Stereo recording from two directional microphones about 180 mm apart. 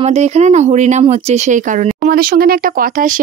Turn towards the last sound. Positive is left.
turn(degrees=-50)  # may be behind; listen again after turning